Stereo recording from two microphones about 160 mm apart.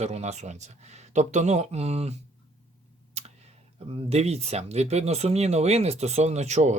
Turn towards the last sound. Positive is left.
turn(degrees=-45)  # may be behind; listen again after turning